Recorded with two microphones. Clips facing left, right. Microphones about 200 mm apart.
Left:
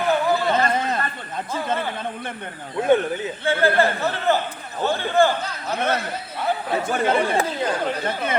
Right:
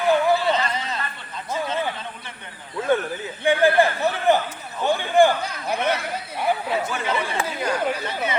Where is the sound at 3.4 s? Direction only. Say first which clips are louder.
Right 2 dB; 15° right (ahead or behind).